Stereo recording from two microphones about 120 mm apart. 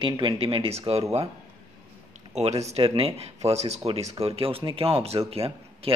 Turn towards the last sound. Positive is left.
turn(degrees=-55)  # may be behind; listen again after turning